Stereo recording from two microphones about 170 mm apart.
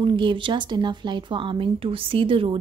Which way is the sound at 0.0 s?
30° right (ahead or behind).